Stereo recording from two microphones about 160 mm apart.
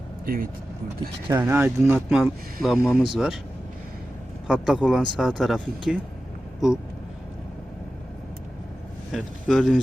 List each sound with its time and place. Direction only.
0.3 s speech: 65° right (ahead or behind)
1.3 s speech: 15° right (ahead or behind)
2.2 s speech: centre (ahead or behind)
2.7 s speech: 15° left (ahead or behind)
3.0 s speech: 5° right (ahead or behind)
4.4 s speech: 5° right (ahead or behind)
9.1 s speech: centre (ahead or behind)